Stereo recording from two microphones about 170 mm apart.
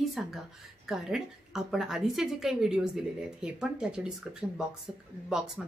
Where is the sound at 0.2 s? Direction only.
5° right (ahead or behind).